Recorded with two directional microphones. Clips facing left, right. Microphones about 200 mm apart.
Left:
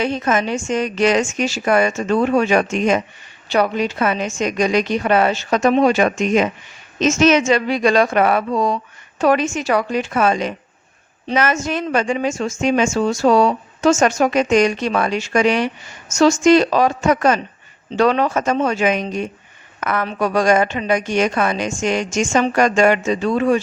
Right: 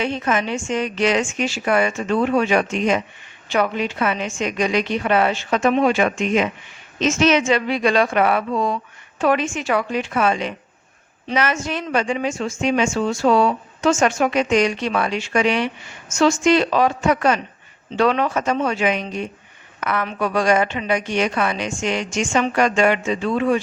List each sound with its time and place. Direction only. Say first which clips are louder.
0.0 s a woman's voice: left 3 dB; 40° left (ahead or behind)